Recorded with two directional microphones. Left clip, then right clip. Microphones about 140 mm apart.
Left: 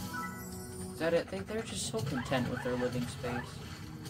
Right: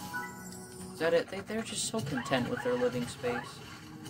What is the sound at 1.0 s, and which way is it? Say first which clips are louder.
Speech: right 3 dB; 90° right.